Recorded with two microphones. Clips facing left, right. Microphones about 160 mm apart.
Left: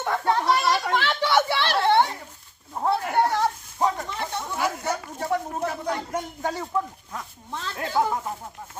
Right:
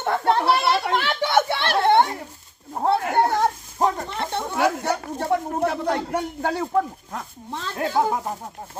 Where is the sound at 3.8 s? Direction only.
50° right (ahead or behind).